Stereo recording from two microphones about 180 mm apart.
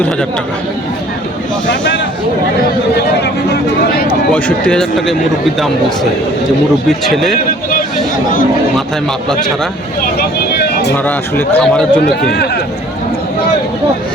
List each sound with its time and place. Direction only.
4.4 s a man's voice: 10° left (ahead or behind)
7.0 s a man's voice: centre (ahead or behind)
10.0 s speech: 60° left (ahead or behind)
10.9 s speech: 10° left (ahead or behind)